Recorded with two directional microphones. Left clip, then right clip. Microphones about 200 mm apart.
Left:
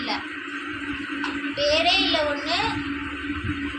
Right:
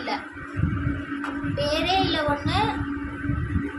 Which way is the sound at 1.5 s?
25° right (ahead or behind).